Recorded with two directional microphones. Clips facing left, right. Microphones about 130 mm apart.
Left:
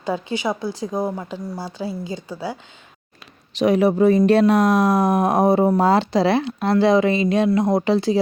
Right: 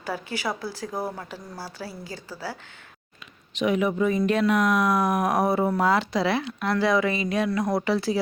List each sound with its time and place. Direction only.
0.0 s speech: 20° left (ahead or behind)
3.5 s speech: 35° left (ahead or behind)